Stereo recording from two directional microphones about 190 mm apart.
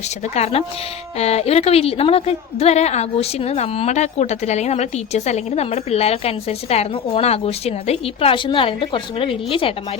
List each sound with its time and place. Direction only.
0.3 s a woman's voice: 35° left (ahead or behind)